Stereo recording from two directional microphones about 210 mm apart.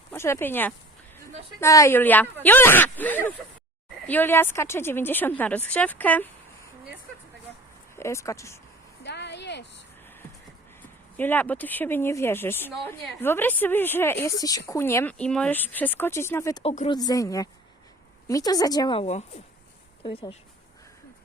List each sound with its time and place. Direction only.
0.1 s a woman's voice: 10° left (ahead or behind)
7.9 s a woman's voice: 15° left (ahead or behind)
9.0 s a sound: 55° left (ahead or behind)
11.2 s a woman's voice: 10° left (ahead or behind)
16.6 s a woman's voice: 30° left (ahead or behind)